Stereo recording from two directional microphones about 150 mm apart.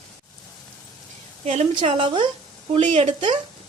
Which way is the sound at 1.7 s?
35° right (ahead or behind).